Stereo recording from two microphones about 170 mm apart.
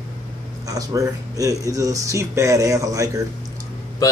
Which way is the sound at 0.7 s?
20° right (ahead or behind).